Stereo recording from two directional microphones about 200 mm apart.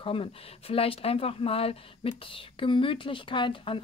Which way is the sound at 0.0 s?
25° left (ahead or behind).